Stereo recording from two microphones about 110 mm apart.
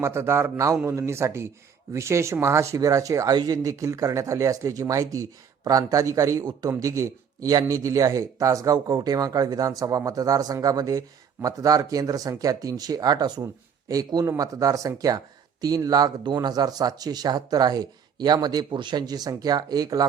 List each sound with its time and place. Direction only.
0.0 s a man's voice: 25° right (ahead or behind)